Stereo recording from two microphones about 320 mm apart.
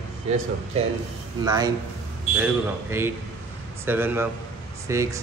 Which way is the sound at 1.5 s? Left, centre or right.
Centre.